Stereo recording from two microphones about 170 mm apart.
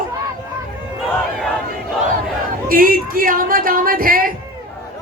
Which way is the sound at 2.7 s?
55° right (ahead or behind).